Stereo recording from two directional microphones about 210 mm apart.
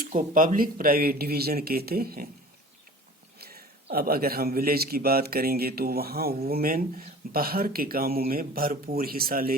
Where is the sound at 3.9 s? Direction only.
45° right (ahead or behind).